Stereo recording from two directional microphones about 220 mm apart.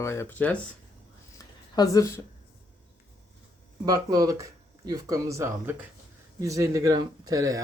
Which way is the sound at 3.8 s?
15° right (ahead or behind).